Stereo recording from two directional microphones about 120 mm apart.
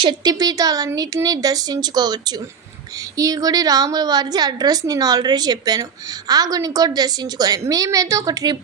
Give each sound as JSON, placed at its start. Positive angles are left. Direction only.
{"t": 0.0, "sound": "a woman's voice", "side_deg": -40}